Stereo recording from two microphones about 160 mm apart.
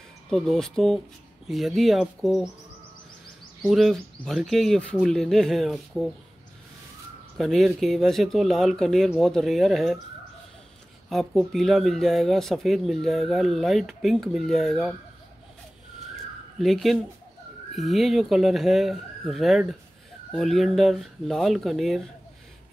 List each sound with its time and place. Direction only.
0.3 s speech: centre (ahead or behind)
3.6 s speech: centre (ahead or behind)
7.3 s speech: centre (ahead or behind)
11.1 s speech: centre (ahead or behind)
16.5 s speech: centre (ahead or behind)